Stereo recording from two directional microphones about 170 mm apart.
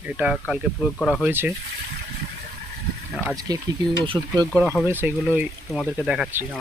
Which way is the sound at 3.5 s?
25° right (ahead or behind).